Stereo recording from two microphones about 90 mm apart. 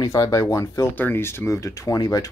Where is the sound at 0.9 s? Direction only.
25° left (ahead or behind); by 2.3 s 40° left (ahead or behind).